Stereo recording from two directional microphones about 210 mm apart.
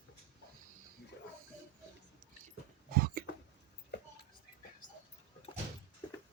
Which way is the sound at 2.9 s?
45° right (ahead or behind).